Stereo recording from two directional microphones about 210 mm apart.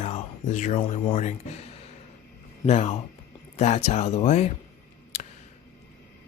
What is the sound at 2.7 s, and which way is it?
Speech, 30° left (ahead or behind).